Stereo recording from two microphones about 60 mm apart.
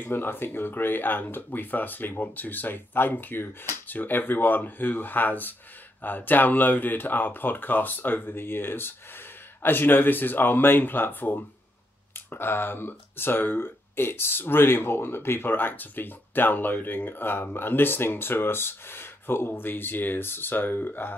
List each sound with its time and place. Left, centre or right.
0.0 s speech: left